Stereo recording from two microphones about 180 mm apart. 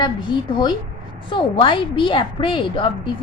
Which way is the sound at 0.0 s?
25° left (ahead or behind).